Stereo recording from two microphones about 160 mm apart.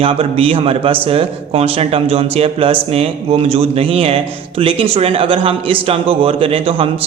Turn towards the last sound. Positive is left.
turn(degrees=-35)  # may be behind; listen again after turning